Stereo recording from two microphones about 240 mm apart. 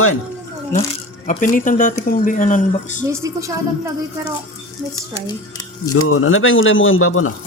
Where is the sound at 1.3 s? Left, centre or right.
Left.